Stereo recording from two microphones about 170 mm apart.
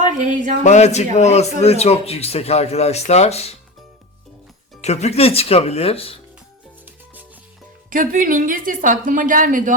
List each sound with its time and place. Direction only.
0.0 s a sound: 45° right (ahead or behind)
0.6 s a man's voice: 40° left (ahead or behind)
4.8 s a man's voice: 40° left (ahead or behind)
6.8 s music: 10° right (ahead or behind)
7.9 s a woman's voice: 55° right (ahead or behind)